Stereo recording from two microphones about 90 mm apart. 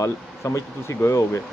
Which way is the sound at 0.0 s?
35° left (ahead or behind).